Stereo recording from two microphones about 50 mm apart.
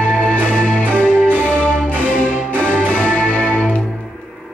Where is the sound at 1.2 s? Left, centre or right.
Left.